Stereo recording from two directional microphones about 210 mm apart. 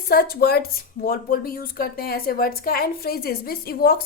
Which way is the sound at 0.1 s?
45° left (ahead or behind).